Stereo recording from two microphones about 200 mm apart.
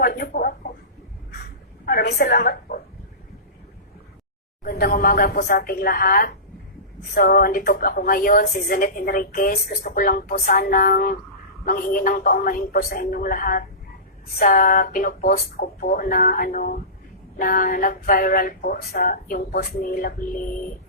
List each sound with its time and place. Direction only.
0.0 s a woman's voice: 45° left (ahead or behind)
1.8 s a woman's voice: 50° left (ahead or behind)
4.6 s a woman's voice: 45° left (ahead or behind)